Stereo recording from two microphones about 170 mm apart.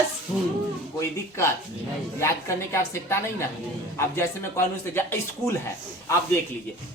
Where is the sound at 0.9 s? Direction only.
20° left (ahead or behind).